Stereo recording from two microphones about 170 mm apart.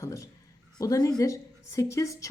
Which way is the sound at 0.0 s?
20° left (ahead or behind).